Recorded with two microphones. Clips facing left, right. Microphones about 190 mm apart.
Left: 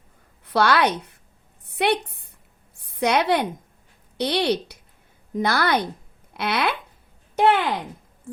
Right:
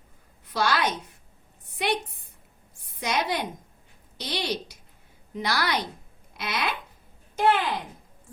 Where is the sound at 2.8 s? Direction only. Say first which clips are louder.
Left 7 dB; 65° left (ahead or behind).